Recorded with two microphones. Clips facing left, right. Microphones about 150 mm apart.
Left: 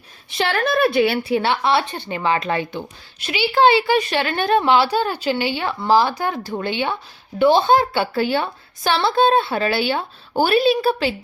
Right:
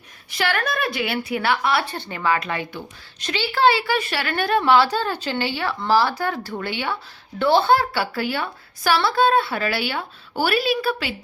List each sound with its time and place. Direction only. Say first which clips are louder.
0.3 s speech: left 3 dB; 25° left (ahead or behind)
3.2 s a woman's voice: left 3 dB; 10° left (ahead or behind)